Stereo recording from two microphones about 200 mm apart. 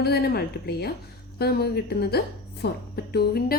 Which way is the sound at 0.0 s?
55° left (ahead or behind).